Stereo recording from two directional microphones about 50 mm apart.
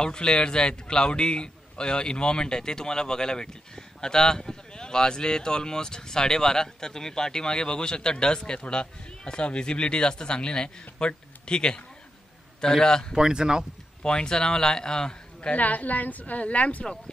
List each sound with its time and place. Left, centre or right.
0.0 s a man's voice: centre
13.1 s speech: centre
14.0 s a man's voice: centre
15.5 s a woman's voice: left